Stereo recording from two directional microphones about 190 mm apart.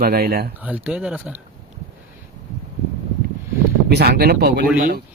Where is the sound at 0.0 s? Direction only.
55° right (ahead or behind).